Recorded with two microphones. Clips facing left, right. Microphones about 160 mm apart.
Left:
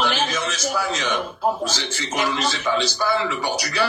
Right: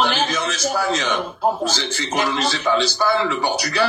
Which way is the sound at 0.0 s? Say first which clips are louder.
Right 2 dB; 30° right (ahead or behind).